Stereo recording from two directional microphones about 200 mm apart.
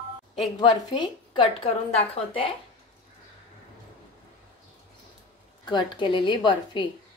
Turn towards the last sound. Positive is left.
turn(degrees=25)  # may be behind; listen again after turning